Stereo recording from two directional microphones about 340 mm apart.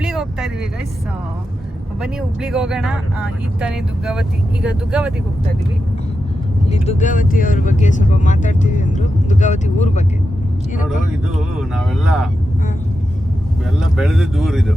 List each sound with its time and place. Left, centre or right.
0.0 s vehicle: centre
2.0 s speech: centre
6.7 s speech: centre
11.3 s speech: centre
13.7 s speech: centre